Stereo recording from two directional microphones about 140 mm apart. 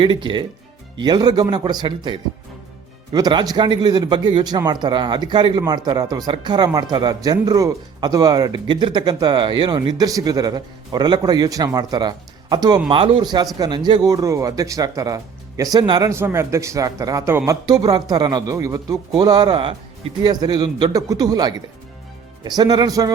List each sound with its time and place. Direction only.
0.0 s a man's voice: 35° right (ahead or behind)